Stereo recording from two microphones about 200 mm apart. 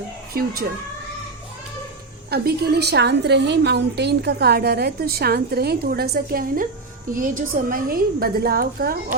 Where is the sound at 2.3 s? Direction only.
50° right (ahead or behind).